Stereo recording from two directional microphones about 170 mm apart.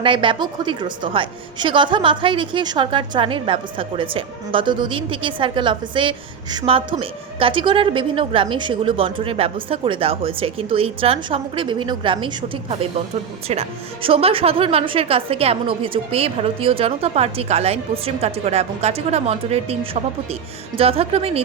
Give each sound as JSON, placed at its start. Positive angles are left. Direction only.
{"t": 0.0, "sound": "a woman's voice", "side_deg": -30}